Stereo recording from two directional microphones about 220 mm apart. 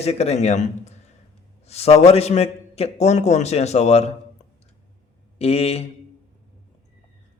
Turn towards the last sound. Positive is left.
turn(degrees=25)  # may be behind; listen again after turning